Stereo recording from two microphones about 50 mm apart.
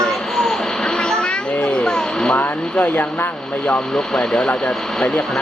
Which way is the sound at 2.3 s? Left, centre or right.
Left.